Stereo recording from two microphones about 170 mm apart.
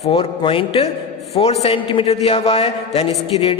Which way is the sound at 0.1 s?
30° left (ahead or behind).